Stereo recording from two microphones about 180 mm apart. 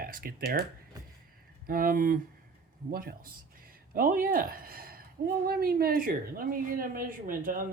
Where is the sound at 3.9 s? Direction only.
50° right (ahead or behind).